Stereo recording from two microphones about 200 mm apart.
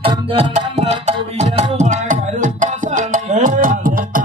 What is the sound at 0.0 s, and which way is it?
Music, 30° right (ahead or behind).